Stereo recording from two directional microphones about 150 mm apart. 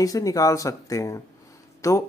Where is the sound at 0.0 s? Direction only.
25° left (ahead or behind).